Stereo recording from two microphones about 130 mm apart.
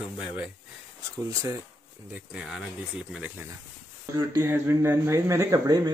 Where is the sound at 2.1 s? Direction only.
5° right (ahead or behind).